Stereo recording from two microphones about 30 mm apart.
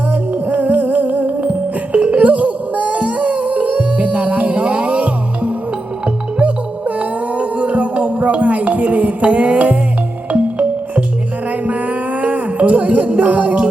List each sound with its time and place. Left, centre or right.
0.1 s music: right
1.9 s music: right